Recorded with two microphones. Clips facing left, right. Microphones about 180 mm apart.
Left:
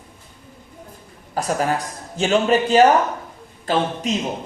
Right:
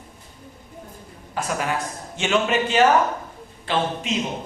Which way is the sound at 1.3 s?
40° left (ahead or behind).